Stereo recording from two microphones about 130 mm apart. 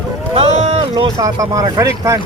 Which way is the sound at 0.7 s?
40° right (ahead or behind).